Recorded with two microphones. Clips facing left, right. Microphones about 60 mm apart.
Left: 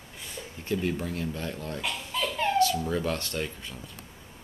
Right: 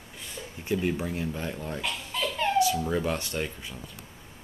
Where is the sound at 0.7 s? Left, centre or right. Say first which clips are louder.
Right 1 dB; centre.